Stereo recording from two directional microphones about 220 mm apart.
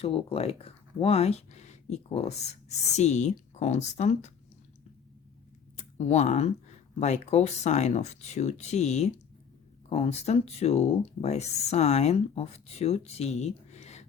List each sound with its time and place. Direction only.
0.0 s speech: 25° left (ahead or behind)
6.0 s speech: 30° left (ahead or behind)